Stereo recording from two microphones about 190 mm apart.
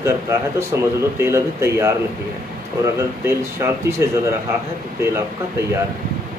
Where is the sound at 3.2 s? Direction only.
15° right (ahead or behind).